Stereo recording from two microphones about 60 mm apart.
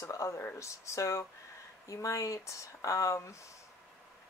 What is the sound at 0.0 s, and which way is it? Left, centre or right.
Speech, left.